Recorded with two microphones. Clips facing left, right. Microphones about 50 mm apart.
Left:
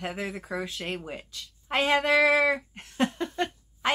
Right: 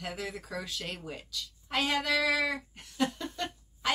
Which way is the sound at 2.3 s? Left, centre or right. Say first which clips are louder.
Left 7 dB; left.